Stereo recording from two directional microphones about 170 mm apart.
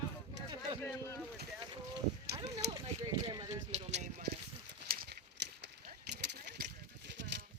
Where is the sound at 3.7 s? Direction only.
40° right (ahead or behind).